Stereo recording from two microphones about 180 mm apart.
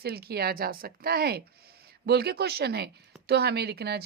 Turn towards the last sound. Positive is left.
turn(degrees=-65)  # may be behind; listen again after turning